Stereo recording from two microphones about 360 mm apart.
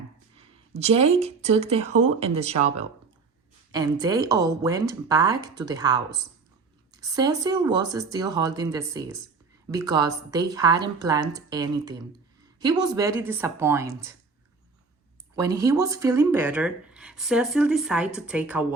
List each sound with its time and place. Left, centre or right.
0.7 s speech: centre
15.4 s speech: centre